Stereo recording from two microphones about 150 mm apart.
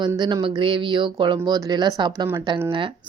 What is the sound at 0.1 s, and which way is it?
A woman's voice, 25° right (ahead or behind).